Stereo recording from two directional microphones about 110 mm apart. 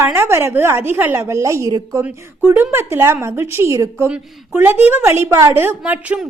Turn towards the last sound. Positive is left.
turn(degrees=-10)  # may be behind; listen again after turning